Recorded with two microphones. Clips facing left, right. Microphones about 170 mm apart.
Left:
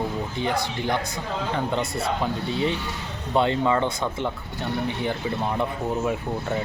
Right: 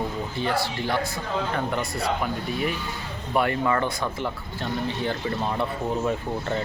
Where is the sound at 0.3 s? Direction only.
20° left (ahead or behind).